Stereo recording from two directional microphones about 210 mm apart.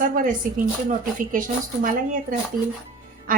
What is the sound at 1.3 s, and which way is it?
Speech, 40° right (ahead or behind).